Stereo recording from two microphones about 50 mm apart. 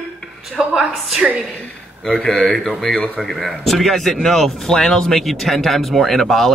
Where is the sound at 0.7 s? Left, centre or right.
Centre.